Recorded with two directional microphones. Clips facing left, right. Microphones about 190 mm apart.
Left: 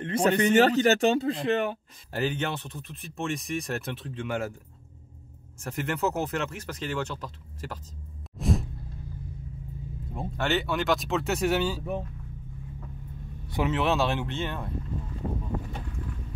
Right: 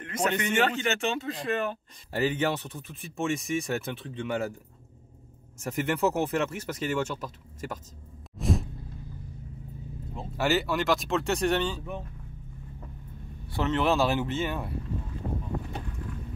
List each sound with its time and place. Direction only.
0.0 s speech: 30° left (ahead or behind)
2.1 s speech: 5° right (ahead or behind)
5.6 s speech: 5° right (ahead or behind)
8.4 s music: centre (ahead or behind)
10.3 s speech: 5° right (ahead or behind)
13.5 s speech: 10° left (ahead or behind)
13.7 s speech: centre (ahead or behind)